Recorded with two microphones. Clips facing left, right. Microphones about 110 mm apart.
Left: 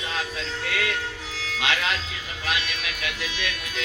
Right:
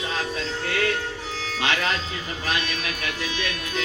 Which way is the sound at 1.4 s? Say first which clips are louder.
Right 1 dB; 40° right (ahead or behind).